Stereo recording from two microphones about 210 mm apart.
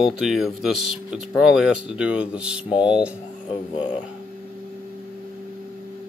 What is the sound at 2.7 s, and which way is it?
Speech, 20° left (ahead or behind).